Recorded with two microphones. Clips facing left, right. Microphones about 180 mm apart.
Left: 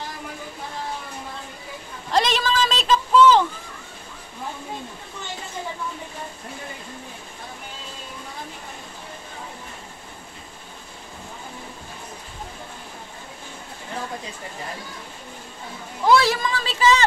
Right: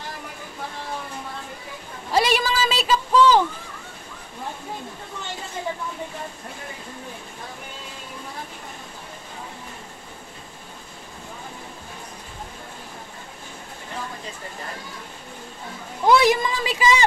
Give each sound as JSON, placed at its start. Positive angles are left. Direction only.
{"t": 2.0, "sound": "a man's voice", "side_deg": -10}
{"t": 16.1, "sound": "a woman's voice", "side_deg": -20}